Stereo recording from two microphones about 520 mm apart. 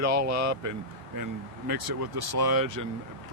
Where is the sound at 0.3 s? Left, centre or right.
Right.